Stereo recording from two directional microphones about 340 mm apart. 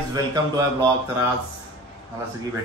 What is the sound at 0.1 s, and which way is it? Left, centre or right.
Speech, centre.